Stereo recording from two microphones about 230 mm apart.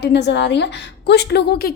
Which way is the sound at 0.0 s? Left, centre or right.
Left.